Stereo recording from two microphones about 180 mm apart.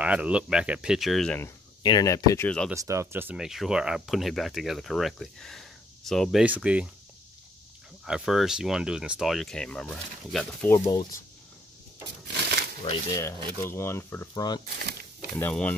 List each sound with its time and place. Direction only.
0.0 s speech: 5° right (ahead or behind)
1.8 s speech: 25° left (ahead or behind)
2.4 s speech: 5° left (ahead or behind)
2.7 s speech: 15° right (ahead or behind)
8.0 s speech: centre (ahead or behind)
10.9 s speech: 25° left (ahead or behind)
12.8 s speech: 30° left (ahead or behind)
13.6 s speech: 15° left (ahead or behind)
14.6 s speech: 60° right (ahead or behind)
15.3 s speech: 10° left (ahead or behind)